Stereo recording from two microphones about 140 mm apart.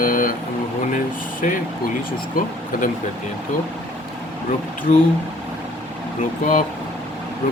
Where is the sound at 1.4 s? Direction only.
70° left (ahead or behind).